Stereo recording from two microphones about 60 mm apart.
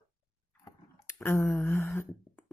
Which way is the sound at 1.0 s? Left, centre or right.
Left.